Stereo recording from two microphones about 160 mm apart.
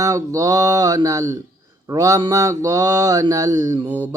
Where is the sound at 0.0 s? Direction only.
20° right (ahead or behind).